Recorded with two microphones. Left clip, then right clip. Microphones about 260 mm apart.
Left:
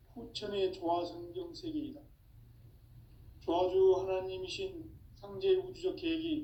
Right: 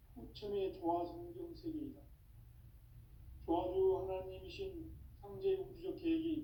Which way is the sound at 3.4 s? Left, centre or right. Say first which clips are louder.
Left 7 dB; left.